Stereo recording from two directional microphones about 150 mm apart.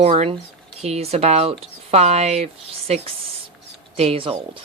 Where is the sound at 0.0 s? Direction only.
45° right (ahead or behind).